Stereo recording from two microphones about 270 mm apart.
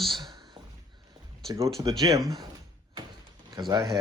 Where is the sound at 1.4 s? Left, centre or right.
Centre.